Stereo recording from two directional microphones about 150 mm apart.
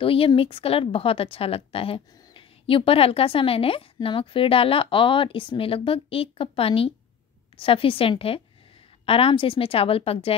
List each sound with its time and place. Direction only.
0.0 s speech: 35° left (ahead or behind)